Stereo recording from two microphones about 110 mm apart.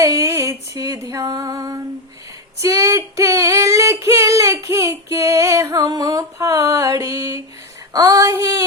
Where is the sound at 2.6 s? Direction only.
30° right (ahead or behind).